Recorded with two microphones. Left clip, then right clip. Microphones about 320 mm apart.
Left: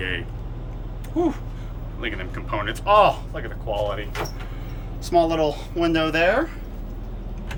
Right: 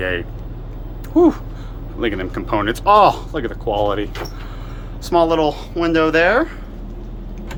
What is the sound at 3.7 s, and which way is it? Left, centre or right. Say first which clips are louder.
Speech: right 6 dB; right.